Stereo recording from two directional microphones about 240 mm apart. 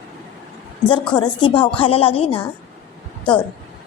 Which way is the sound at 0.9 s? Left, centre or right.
Centre.